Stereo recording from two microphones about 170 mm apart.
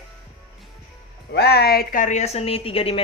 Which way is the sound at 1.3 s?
75° left (ahead or behind).